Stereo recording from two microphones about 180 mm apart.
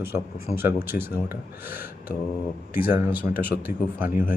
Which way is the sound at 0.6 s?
10° right (ahead or behind).